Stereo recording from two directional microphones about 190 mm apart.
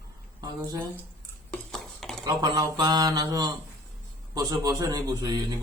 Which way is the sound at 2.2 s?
20° right (ahead or behind).